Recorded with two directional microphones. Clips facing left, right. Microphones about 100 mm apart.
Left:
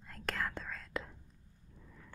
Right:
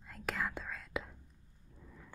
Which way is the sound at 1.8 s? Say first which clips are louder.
Right 2 dB; 5° right (ahead or behind).